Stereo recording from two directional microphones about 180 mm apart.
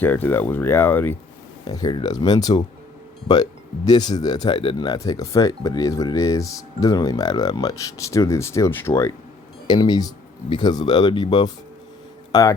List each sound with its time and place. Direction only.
0.0 s speech: 10° left (ahead or behind)
1.6 s speech: 20° left (ahead or behind)
3.8 s speech: 20° left (ahead or behind)